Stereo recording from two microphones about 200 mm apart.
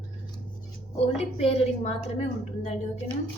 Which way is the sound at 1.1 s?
30° left (ahead or behind).